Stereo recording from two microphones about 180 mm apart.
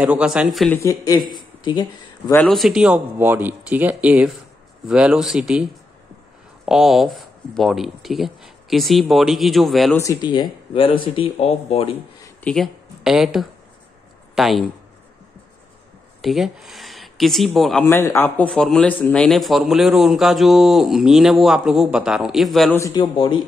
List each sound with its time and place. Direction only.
0.0 s speech: 5° right (ahead or behind)
0.7 s a man's voice: 15° left (ahead or behind)
2.3 s speech: 5° left (ahead or behind)
9.9 s speech: 15° left (ahead or behind); by 11.9 s 35° left (ahead or behind)
12.4 s speech: 5° left (ahead or behind)
16.2 s speech: centre (ahead or behind)
17.8 s speech: 15° left (ahead or behind)
22.8 s a man's voice: 20° left (ahead or behind)
23.1 s speech: 30° left (ahead or behind)